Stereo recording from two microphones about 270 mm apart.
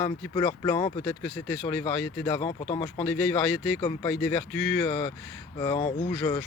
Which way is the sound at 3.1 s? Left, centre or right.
Centre.